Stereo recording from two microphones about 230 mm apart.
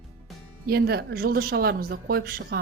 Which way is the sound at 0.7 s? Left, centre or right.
Right.